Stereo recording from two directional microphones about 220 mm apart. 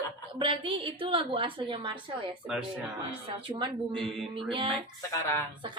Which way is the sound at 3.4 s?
20° right (ahead or behind).